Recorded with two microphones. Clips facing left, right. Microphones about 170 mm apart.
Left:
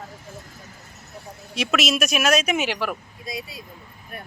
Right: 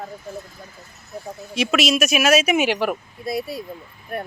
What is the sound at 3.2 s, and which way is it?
Speech, 60° right (ahead or behind).